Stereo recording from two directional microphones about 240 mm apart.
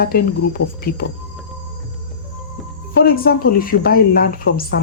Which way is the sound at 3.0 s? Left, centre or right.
Left.